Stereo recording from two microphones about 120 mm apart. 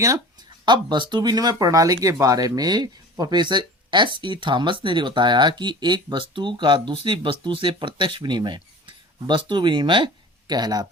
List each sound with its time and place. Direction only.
0.6 s speech: 40° right (ahead or behind)